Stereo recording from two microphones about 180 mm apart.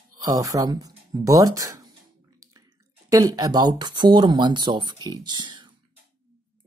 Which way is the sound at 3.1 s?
20° right (ahead or behind).